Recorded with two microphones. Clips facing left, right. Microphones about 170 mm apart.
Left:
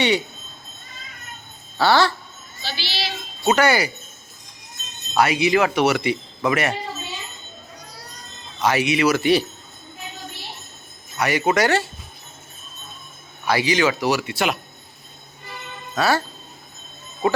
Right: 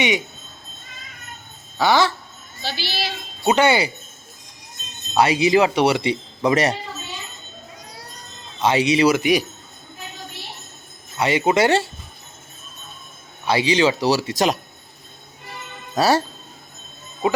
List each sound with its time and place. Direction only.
1.8 s a sound: 15° right (ahead or behind)
2.6 s speech: 55° right (ahead or behind)
3.5 s speech: 25° right (ahead or behind)
5.1 s speech: 25° right (ahead or behind)
8.6 s speech: 30° right (ahead or behind)
9.1 s a sound: 15° right (ahead or behind)
11.2 s speech: 25° right (ahead or behind)
13.4 s speech: 25° right (ahead or behind)
16.0 s speech: 35° right (ahead or behind)